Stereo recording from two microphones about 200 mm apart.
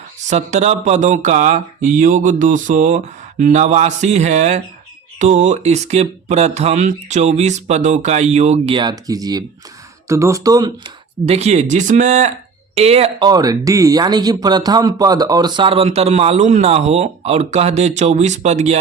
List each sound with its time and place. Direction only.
0.3 s speech: 35° right (ahead or behind); by 10.9 s 20° right (ahead or behind)
11.3 s speech: 35° right (ahead or behind)